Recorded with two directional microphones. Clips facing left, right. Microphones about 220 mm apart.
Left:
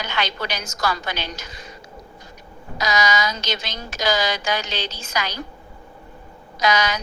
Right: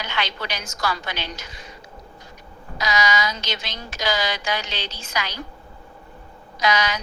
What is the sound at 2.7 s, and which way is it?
A woman's voice, 45° left (ahead or behind).